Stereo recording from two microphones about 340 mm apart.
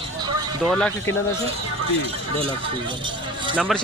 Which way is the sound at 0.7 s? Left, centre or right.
Centre.